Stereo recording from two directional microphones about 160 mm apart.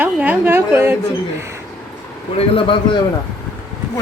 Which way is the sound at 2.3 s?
35° left (ahead or behind).